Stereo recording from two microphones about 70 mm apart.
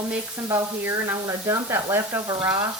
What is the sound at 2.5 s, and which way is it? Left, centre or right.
Speech, right.